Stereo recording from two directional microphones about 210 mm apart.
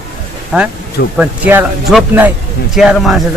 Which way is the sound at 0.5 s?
5° right (ahead or behind).